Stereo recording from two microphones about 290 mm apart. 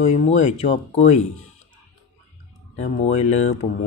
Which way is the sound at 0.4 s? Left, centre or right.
Left.